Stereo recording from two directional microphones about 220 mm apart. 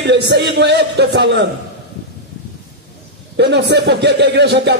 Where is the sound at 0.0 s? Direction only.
50° right (ahead or behind).